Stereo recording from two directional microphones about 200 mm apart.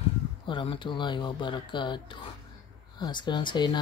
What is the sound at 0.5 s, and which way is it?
Speech, 25° left (ahead or behind).